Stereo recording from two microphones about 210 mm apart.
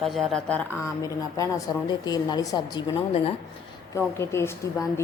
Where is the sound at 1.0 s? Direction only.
15° left (ahead or behind).